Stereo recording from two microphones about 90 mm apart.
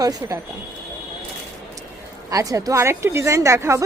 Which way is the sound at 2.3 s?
40° right (ahead or behind).